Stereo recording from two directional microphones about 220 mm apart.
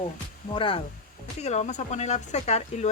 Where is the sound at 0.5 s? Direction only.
25° left (ahead or behind).